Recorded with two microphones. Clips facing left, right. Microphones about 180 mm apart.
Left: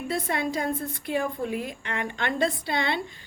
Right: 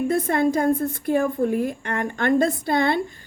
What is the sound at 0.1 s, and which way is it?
A woman's voice, 50° right (ahead or behind).